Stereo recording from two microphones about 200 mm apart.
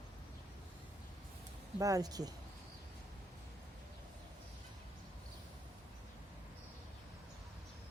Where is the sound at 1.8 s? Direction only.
15° right (ahead or behind).